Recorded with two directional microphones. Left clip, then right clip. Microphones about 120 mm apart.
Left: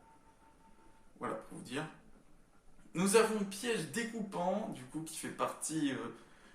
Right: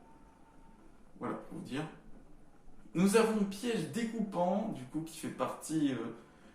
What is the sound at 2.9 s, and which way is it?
A man's voice, 60° left (ahead or behind).